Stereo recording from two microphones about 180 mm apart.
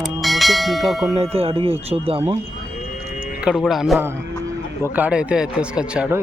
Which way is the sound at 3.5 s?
5° right (ahead or behind).